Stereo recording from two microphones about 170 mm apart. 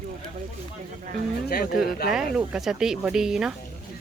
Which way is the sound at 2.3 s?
5° right (ahead or behind).